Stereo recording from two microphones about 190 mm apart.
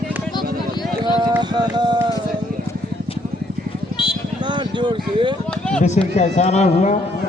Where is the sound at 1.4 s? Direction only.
25° right (ahead or behind).